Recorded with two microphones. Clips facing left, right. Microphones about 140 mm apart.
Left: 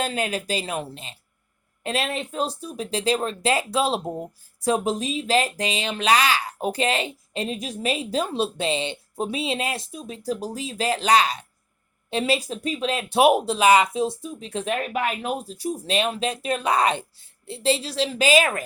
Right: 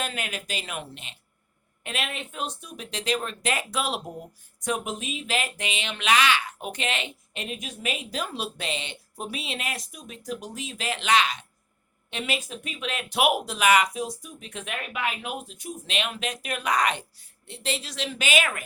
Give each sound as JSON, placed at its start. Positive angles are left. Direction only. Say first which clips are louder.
{"t": 0.0, "sound": "speech", "louder": "left 7 dB", "side_deg": 35}